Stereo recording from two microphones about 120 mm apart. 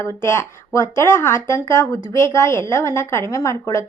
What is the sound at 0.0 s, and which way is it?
A woman's voice, 20° left (ahead or behind).